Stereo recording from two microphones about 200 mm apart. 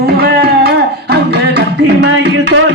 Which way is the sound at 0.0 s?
50° right (ahead or behind).